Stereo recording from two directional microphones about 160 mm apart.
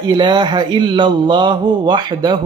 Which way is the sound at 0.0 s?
30° right (ahead or behind).